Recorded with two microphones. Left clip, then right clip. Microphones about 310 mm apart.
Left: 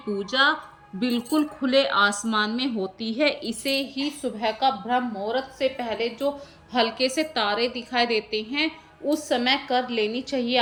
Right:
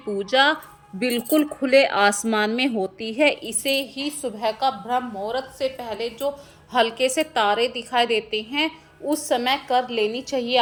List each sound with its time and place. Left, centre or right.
0.3 s a woman's voice: centre